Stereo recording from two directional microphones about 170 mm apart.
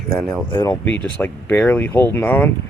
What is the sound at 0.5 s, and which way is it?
Speech, 15° left (ahead or behind).